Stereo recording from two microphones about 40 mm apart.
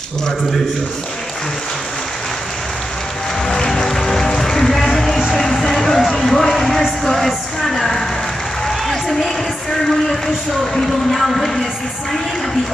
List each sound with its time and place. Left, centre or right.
3.4 s music: centre
4.4 s run: centre
5.3 s music: centre
8.6 s applause: centre
10.2 s a sound: centre
11.1 s music: centre